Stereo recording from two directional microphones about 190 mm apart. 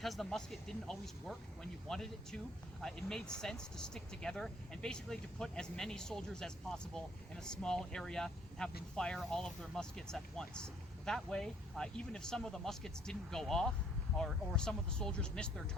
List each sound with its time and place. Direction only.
0.0 s speech: centre (ahead or behind)